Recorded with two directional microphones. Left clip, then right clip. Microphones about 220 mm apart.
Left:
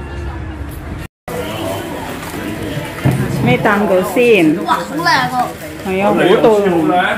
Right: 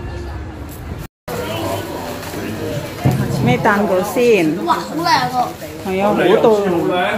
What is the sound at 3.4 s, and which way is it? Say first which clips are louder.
Speech: left 2 dB; centre (ahead or behind).